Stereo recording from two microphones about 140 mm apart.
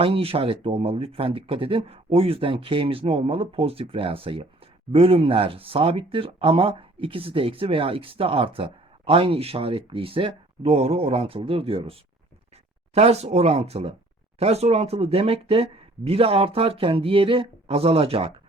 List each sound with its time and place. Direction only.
0.0 s speech: 40° right (ahead or behind)